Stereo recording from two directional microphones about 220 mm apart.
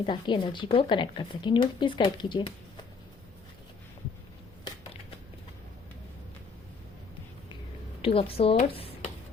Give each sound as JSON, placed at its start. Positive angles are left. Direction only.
{"t": 0.0, "sound": "speech", "side_deg": 20}
{"t": 8.0, "sound": "speech", "side_deg": 25}